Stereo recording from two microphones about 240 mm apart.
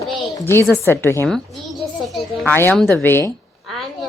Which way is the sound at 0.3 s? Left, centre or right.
Centre.